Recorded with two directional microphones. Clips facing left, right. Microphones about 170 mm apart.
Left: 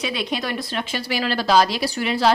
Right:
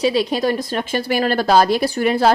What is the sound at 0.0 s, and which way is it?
A woman's voice, 40° right (ahead or behind).